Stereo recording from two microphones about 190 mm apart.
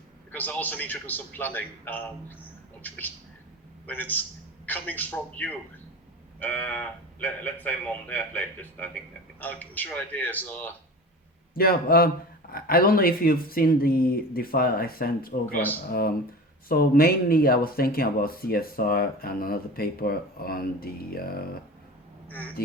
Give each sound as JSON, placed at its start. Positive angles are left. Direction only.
{"t": 0.3, "sound": "speech", "side_deg": 10}
{"t": 11.5, "sound": "speech", "side_deg": 50}
{"t": 15.4, "sound": "speech", "side_deg": 10}
{"t": 15.9, "sound": "speech", "side_deg": 50}
{"t": 22.3, "sound": "speech", "side_deg": 10}